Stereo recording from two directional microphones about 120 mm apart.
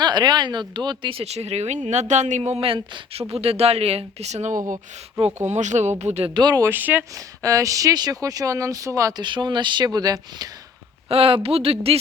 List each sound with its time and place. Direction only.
0.0 s speech: 35° right (ahead or behind)
1.2 s speech: 60° right (ahead or behind)
5.5 s speech: 80° right
6.0 s speech: 65° right (ahead or behind)
6.3 s speech: 35° right (ahead or behind)
6.7 s speech: 15° right (ahead or behind)
7.1 s speech: 30° right (ahead or behind)
9.2 s speech: 40° right (ahead or behind)
11.1 s speech: 55° right (ahead or behind)